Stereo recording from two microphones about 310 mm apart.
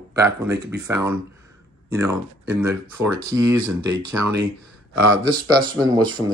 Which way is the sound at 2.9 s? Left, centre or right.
Right.